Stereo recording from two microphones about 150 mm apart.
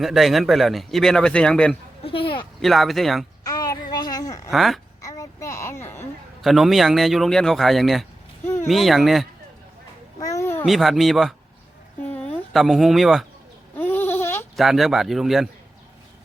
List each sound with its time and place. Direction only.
0.0 s speech: centre (ahead or behind)
3.4 s a sound: 25° left (ahead or behind)
4.5 s speech: centre (ahead or behind)
5.0 s a sound: 20° left (ahead or behind)
6.4 s speech: centre (ahead or behind)
10.2 s a sound: 20° left (ahead or behind)
10.7 s speech: centre (ahead or behind)
12.5 s speech: centre (ahead or behind)
13.7 s goat: 15° left (ahead or behind)
14.5 s speech: centre (ahead or behind)